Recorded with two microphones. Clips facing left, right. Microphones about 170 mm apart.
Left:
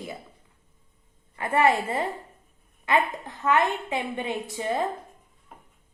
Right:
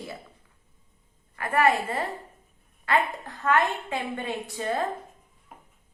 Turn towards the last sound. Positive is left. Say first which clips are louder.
# left 1 dB
turn(degrees=15)  # may be behind; listen again after turning